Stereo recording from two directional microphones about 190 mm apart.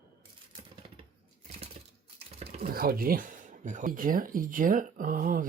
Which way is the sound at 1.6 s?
35° right (ahead or behind).